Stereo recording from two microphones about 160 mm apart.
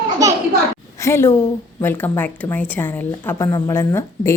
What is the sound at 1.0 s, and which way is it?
A woman's voice, 15° left (ahead or behind).